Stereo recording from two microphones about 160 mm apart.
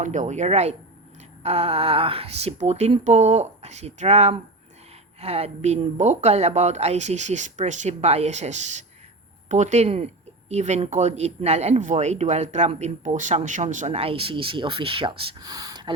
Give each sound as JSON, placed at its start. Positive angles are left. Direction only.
{"t": 0.0, "sound": "speech", "side_deg": -50}